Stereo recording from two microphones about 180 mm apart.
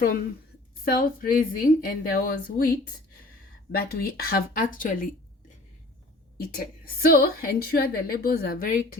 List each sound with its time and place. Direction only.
0.9 s a woman's voice: 55° left (ahead or behind)
6.3 s a woman's voice: 55° left (ahead or behind)